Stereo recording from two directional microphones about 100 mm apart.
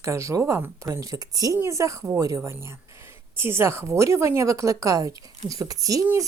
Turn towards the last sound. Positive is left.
turn(degrees=-35)  # may be behind; listen again after turning